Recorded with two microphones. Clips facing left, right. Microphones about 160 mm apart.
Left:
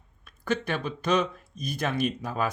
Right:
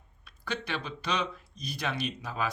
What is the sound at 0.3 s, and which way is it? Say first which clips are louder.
Speech: left 7 dB; 50° left (ahead or behind).